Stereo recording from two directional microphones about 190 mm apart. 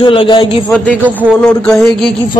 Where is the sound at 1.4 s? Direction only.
5° left (ahead or behind).